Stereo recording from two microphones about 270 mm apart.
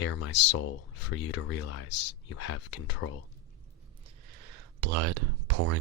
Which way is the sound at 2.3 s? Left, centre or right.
Left.